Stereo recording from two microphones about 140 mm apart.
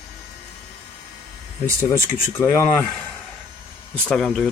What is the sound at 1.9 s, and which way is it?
Speech, 20° left (ahead or behind).